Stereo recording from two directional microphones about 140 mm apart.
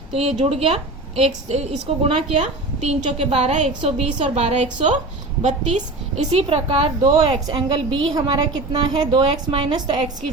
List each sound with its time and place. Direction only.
0.1 s a woman's voice: 45° right (ahead or behind)
7.4 s a woman's voice: 30° right (ahead or behind)